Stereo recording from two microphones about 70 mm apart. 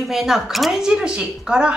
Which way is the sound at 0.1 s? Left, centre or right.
Centre.